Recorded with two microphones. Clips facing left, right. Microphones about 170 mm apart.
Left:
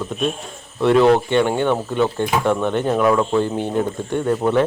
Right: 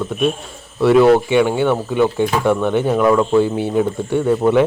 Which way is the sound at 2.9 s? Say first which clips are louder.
Right 4 dB; centre (ahead or behind).